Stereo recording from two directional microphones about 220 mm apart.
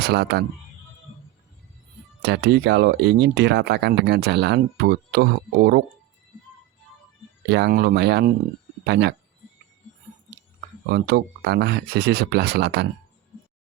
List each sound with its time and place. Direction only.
0.0 s speech: 50° right (ahead or behind)
2.2 s speech: 50° right (ahead or behind)
7.5 s speech: 45° right (ahead or behind)
10.8 s speech: 45° right (ahead or behind)